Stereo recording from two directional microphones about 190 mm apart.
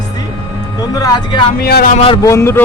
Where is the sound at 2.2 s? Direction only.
15° left (ahead or behind).